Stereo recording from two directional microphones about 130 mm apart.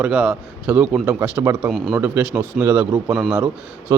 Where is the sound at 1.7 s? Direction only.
Centre (ahead or behind).